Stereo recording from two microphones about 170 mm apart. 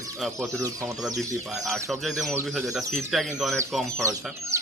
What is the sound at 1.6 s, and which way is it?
Speech, centre (ahead or behind).